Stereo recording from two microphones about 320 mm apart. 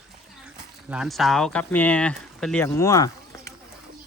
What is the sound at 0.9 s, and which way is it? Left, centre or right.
Speech, centre.